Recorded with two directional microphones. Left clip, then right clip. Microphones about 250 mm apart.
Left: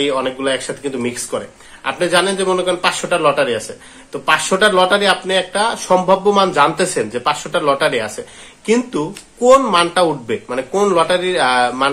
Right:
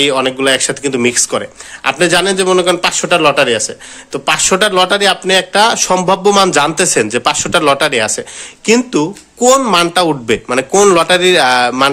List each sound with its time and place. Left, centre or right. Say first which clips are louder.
0.0 s speech: right 6 dB; right